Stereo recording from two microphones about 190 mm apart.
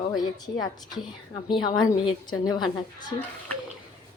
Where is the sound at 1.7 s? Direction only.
20° left (ahead or behind).